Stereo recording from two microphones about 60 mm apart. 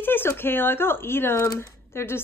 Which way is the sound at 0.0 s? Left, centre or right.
Left.